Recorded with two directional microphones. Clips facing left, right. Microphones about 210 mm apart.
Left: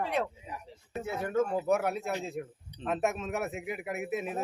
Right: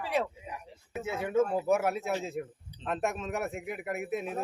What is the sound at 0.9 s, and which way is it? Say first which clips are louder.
Speech: right 2 dB; 5° right (ahead or behind).